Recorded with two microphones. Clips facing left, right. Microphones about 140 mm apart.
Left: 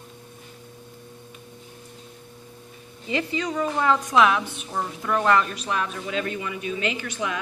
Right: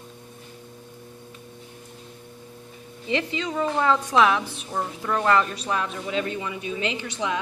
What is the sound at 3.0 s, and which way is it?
A woman's voice, 25° right (ahead or behind).